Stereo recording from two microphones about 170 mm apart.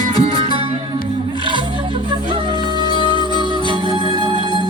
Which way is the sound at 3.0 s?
25° left (ahead or behind).